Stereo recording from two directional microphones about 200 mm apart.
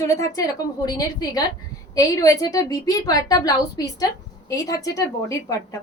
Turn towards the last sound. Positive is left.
turn(degrees=15)  # may be behind; listen again after turning